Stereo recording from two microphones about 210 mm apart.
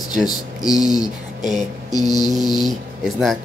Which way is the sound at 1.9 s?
20° left (ahead or behind).